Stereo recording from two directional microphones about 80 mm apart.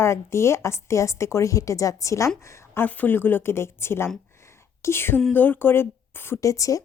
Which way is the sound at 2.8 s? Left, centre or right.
Left.